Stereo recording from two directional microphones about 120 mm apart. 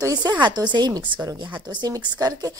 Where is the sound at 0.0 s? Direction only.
35° right (ahead or behind).